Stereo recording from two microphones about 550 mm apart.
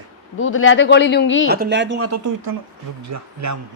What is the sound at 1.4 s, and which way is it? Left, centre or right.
A man's voice, centre.